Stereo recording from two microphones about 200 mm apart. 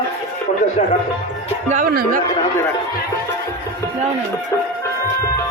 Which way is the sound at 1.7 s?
45° right (ahead or behind).